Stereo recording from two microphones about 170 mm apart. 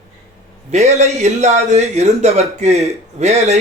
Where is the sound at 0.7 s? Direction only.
40° right (ahead or behind).